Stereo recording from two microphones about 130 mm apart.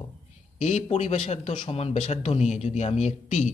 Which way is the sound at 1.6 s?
50° left (ahead or behind).